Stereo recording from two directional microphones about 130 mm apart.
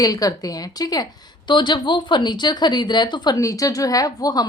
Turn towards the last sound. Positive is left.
turn(degrees=30)  # may be behind; listen again after turning